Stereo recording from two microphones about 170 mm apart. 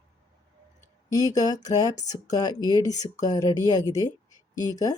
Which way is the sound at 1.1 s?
20° left (ahead or behind).